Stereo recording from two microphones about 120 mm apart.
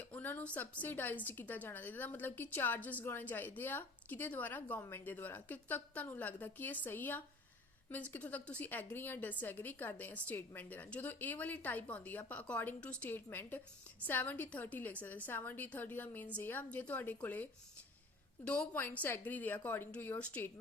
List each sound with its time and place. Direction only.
0.0 s a woman's voice: 15° left (ahead or behind)